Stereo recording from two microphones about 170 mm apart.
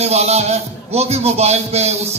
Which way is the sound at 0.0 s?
40° right (ahead or behind).